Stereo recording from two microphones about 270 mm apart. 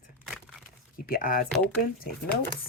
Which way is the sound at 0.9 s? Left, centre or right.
Left.